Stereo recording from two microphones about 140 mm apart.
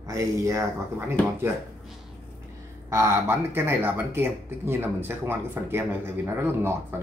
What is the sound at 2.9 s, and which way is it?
Speech, 20° right (ahead or behind).